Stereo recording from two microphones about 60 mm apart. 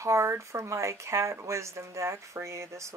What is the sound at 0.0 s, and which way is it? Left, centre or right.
Speech, right.